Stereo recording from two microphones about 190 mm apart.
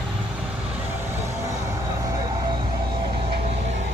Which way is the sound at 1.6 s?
15° right (ahead or behind).